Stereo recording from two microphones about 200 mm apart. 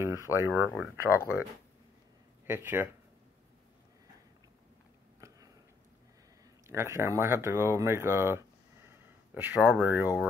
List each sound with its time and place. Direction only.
0.0 s a sound: 15° right (ahead or behind)
0.7 s speech: 15° left (ahead or behind)
2.4 s speech: 10° right (ahead or behind)
6.7 s speech: 10° right (ahead or behind)